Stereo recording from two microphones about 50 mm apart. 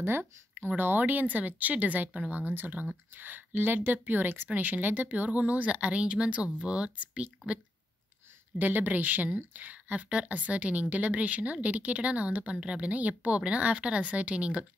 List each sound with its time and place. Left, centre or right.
0.2 s a woman's voice: right
8.5 s speech: right